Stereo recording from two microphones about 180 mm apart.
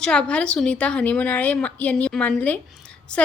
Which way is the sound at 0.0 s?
5° left (ahead or behind).